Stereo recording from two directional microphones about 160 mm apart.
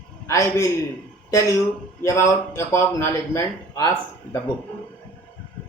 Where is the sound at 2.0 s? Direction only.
15° left (ahead or behind).